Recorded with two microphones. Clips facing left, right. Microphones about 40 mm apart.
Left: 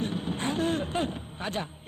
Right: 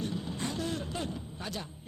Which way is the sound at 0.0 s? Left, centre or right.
Left.